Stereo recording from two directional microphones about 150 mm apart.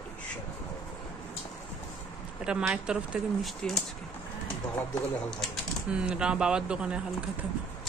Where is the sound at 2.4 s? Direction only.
5° right (ahead or behind).